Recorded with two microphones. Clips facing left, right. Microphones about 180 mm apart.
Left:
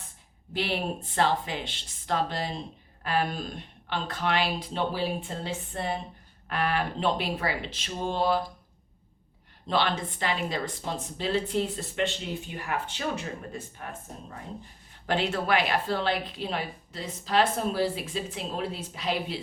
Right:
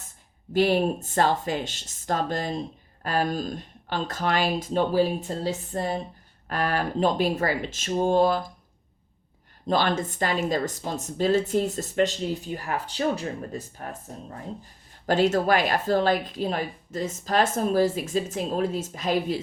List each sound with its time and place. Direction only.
0.5 s a woman's voice: 45° right (ahead or behind)
9.6 s a woman's voice: 45° right (ahead or behind)
15.0 s a woman's voice: 40° right (ahead or behind)